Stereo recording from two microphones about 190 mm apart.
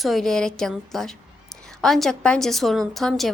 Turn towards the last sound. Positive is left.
turn(degrees=0)  # may be behind; listen again after turning